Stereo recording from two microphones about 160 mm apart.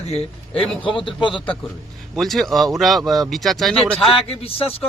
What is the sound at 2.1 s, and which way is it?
Speech, centre (ahead or behind).